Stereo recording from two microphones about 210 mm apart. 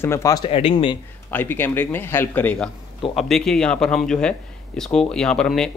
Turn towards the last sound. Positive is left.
turn(degrees=5)  # may be behind; listen again after turning